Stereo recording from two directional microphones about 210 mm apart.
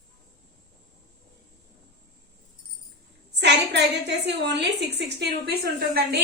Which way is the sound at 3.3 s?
55° right (ahead or behind).